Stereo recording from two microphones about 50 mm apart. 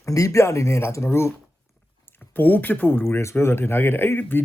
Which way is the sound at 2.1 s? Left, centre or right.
Left.